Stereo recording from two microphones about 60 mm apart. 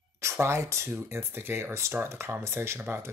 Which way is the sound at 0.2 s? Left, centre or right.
Right.